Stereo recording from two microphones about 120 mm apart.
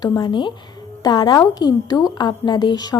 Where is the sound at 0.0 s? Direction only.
35° left (ahead or behind).